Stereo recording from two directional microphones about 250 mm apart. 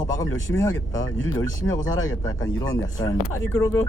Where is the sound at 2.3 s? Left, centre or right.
Centre.